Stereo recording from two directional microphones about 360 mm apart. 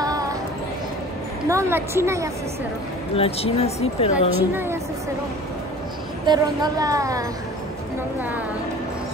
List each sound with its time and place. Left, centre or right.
0.0 s a sound: centre
1.5 s speech: centre
3.2 s speech: centre
6.2 s speech: centre